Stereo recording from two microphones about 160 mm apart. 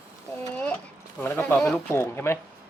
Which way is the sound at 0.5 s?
10° left (ahead or behind).